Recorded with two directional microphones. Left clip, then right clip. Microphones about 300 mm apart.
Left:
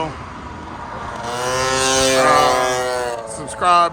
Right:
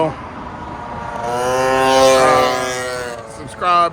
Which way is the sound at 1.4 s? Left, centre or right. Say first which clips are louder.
Right 3 dB; centre.